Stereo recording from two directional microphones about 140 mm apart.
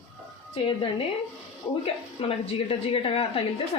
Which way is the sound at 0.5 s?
40° left (ahead or behind).